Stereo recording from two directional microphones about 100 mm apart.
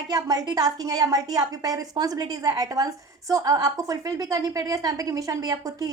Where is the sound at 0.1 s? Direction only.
40° right (ahead or behind).